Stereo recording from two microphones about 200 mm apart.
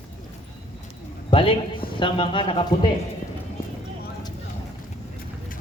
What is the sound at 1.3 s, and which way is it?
Speech, 25° left (ahead or behind).